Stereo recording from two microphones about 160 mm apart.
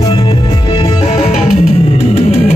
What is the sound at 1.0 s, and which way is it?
Music, 40° left (ahead or behind).